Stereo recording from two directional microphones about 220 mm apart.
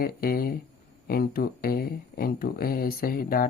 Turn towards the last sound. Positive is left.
turn(degrees=40)  # may be behind; listen again after turning